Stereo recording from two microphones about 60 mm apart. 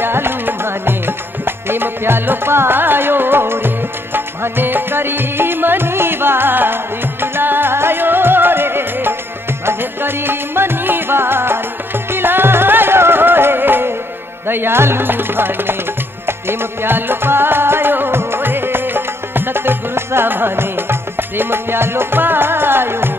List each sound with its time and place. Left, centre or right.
0.0 s music: right